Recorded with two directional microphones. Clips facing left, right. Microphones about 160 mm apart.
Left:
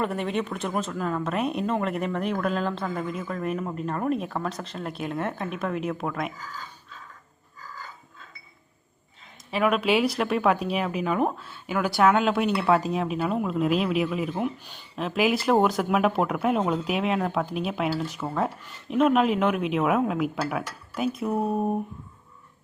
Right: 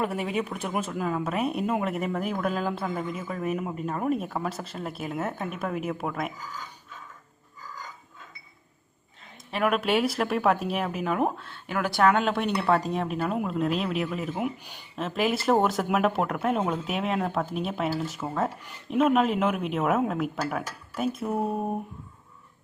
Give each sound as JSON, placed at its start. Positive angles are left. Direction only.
{"t": 0.0, "sound": "speech", "side_deg": -5}
{"t": 6.3, "sound": "speech", "side_deg": -15}
{"t": 9.5, "sound": "speech", "side_deg": 0}